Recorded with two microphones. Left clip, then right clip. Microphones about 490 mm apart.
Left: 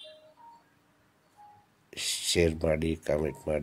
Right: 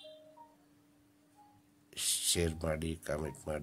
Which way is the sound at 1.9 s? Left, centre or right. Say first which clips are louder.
Left 4 dB; right.